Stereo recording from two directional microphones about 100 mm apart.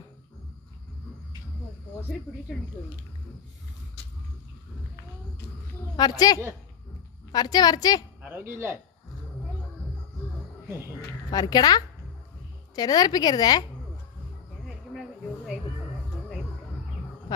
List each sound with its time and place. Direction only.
6.0 s a woman's voice: 40° left (ahead or behind)
8.2 s speech: 20° right (ahead or behind)
11.3 s a woman's voice: 40° left (ahead or behind)
14.6 s a sound: centre (ahead or behind)